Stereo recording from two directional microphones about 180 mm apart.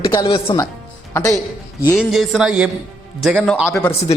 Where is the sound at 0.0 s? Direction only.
20° left (ahead or behind).